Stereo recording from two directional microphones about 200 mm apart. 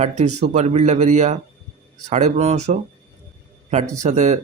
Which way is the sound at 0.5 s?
35° right (ahead or behind).